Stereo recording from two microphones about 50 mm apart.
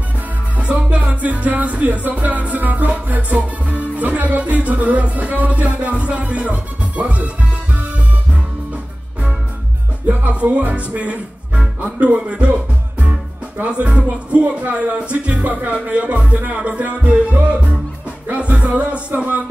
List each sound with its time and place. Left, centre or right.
0.6 s music: right
10.0 s music: right
13.7 s music: right